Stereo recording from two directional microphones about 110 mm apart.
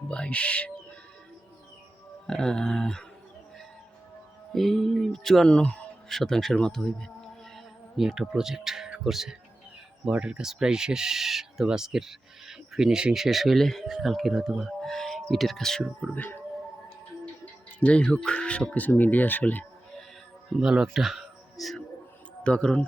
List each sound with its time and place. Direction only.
0.1 s speech: 10° left (ahead or behind)
2.2 s speech: 5° left (ahead or behind)
4.5 s speech: centre (ahead or behind)
16.1 s speech: 15° left (ahead or behind)
17.4 s speech: 10° left (ahead or behind)
20.5 s a man's voice: 5° right (ahead or behind)